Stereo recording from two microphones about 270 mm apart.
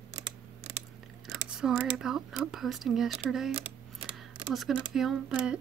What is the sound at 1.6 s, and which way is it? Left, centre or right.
Speech, centre.